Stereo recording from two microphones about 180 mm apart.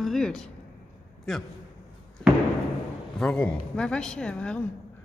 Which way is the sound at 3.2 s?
5° left (ahead or behind).